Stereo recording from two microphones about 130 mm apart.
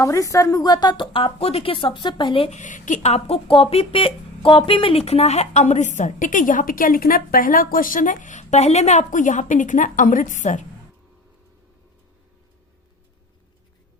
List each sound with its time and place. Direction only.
0.0 s a woman's voice: 25° left (ahead or behind)
2.5 s speech: 70° left (ahead or behind)